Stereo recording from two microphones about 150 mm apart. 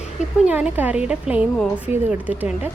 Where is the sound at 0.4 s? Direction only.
10° right (ahead or behind).